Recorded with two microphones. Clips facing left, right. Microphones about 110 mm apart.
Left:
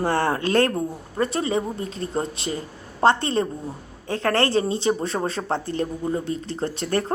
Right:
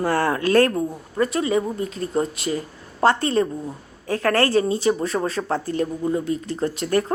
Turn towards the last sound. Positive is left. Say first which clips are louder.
# right 3 dB
turn(degrees=30)  # may be behind; listen again after turning